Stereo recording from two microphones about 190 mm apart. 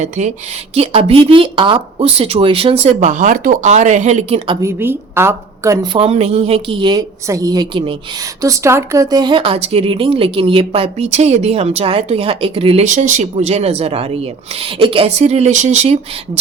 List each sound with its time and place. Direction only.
0.0 s speech: 40° right (ahead or behind)
4.6 s a woman's voice: 10° right (ahead or behind); by 16.4 s 35° right (ahead or behind)